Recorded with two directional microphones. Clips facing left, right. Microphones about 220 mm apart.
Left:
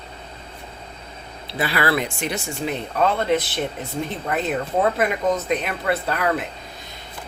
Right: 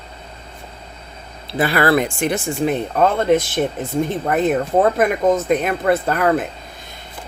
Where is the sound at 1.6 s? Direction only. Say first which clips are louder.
Right 6 dB; 50° right (ahead or behind).